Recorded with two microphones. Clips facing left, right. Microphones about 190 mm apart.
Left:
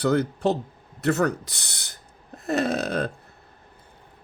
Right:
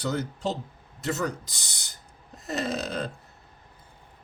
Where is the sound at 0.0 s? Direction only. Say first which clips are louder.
Left 7 dB; 60° left (ahead or behind).